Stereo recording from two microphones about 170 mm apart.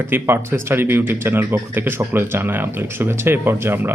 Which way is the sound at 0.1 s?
15° right (ahead or behind).